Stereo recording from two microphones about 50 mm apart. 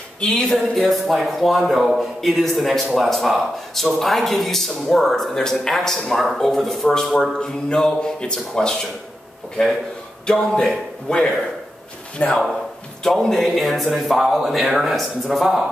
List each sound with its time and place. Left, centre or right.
0.5 s speech: centre
10.2 s speech: centre
12.2 s speech: left
13.0 s speech: centre